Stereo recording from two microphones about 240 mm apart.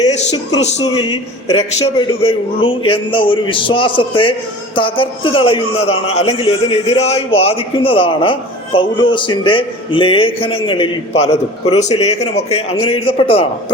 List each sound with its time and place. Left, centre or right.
0.9 s a man's voice: left